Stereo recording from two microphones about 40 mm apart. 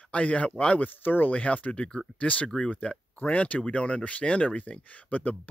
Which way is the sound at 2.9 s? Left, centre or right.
Left.